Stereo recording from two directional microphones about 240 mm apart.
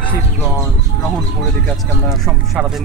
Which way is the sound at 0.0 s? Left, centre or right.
Centre.